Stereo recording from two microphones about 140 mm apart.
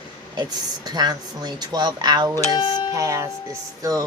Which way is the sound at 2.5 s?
35° left (ahead or behind).